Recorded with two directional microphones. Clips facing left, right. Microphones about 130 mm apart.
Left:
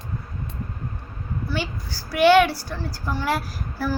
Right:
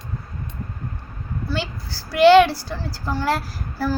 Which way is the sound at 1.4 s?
15° left (ahead or behind).